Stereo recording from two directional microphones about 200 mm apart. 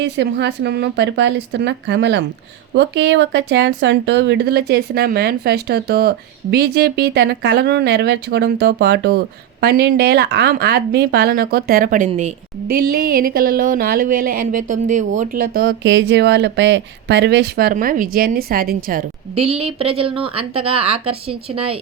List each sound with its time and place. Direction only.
0.0 s speech: 60° right (ahead or behind); by 12.3 s 40° right (ahead or behind)
12.6 s speech: 50° right (ahead or behind)
19.4 s a woman's voice: 30° right (ahead or behind)